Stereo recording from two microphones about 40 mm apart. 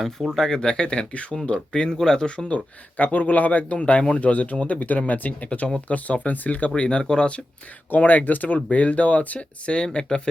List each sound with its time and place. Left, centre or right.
0.0 s speech: centre
3.0 s speech: left
6.7 s speech: left
7.9 s speech: left